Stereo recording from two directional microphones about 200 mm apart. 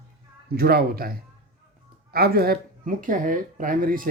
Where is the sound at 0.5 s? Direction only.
50° right (ahead or behind).